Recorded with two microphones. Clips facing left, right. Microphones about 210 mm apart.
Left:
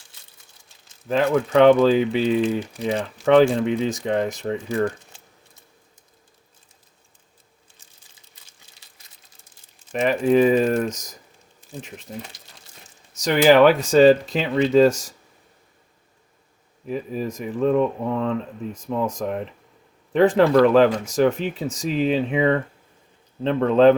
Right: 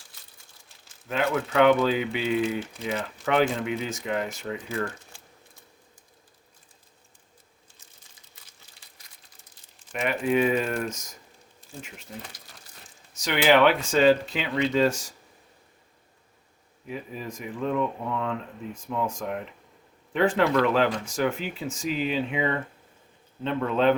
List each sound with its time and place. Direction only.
1.0 s speech: 40° left (ahead or behind)
5.1 s a sound: 20° left (ahead or behind)
9.9 s speech: 40° left (ahead or behind)
13.1 s speech: 40° left (ahead or behind)
16.8 s speech: 40° left (ahead or behind)
23.6 s speech: 40° left (ahead or behind)